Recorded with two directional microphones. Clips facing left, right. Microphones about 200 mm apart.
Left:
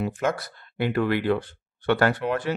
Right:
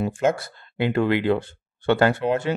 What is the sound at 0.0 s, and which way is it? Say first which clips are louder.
Speech: right 4 dB; 25° right (ahead or behind).